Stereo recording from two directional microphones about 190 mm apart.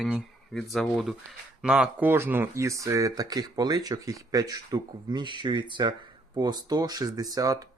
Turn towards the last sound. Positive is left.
turn(degrees=-20)  # may be behind; listen again after turning